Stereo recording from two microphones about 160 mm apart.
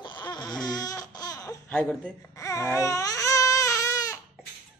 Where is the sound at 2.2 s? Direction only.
20° left (ahead or behind).